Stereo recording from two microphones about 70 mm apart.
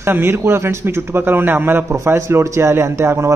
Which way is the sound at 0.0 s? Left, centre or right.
Right.